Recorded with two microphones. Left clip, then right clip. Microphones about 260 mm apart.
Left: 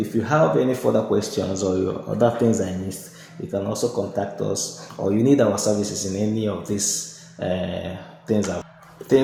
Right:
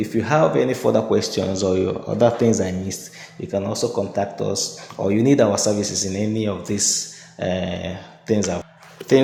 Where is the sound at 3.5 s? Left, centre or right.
Right.